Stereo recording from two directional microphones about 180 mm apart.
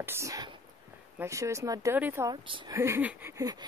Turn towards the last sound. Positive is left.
turn(degrees=-20)  # may be behind; listen again after turning